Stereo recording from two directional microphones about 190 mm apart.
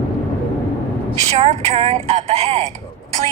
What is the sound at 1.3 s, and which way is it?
Speech, 35° right (ahead or behind).